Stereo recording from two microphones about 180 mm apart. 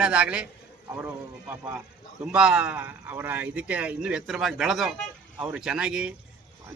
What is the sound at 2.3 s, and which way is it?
Speech, 5° right (ahead or behind).